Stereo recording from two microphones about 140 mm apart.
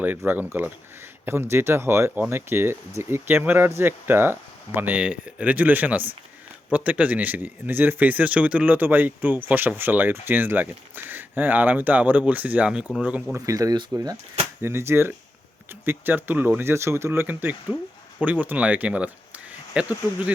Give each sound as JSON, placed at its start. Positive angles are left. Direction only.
{"t": 0.3, "sound": "speech", "side_deg": -15}
{"t": 13.3, "sound": "speech", "side_deg": -25}